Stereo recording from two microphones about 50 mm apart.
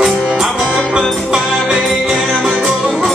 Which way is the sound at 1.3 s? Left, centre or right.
Centre.